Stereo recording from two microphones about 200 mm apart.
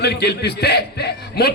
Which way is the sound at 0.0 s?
55° left (ahead or behind).